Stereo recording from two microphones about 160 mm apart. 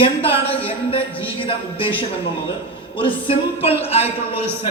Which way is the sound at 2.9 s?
30° left (ahead or behind).